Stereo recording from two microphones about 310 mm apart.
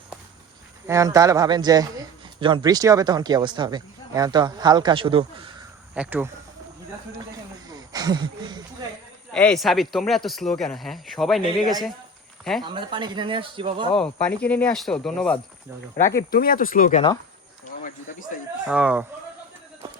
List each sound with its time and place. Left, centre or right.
0.9 s speech: centre
5.9 s speech: centre
7.9 s speech: centre
9.3 s speech: centre
11.4 s speech: centre
13.9 s speech: centre
16.1 s speech: left
18.6 s speech: centre